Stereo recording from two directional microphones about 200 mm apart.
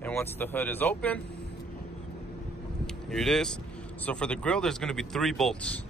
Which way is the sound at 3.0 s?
Centre (ahead or behind).